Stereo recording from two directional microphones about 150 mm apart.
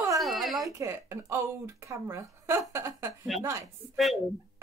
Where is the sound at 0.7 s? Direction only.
15° right (ahead or behind).